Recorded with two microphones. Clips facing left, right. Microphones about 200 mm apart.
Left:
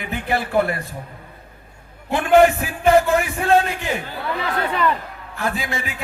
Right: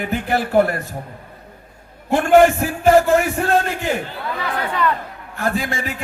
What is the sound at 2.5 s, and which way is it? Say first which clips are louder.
Speech: right 2 dB; 55° right (ahead or behind).